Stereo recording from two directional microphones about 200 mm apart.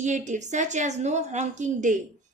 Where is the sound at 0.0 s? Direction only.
35° right (ahead or behind).